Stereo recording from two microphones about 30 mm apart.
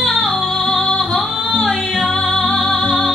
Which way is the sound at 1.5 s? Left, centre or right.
Centre.